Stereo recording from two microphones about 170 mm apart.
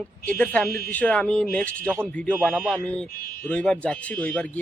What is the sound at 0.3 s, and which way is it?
A man's voice, 10° left (ahead or behind).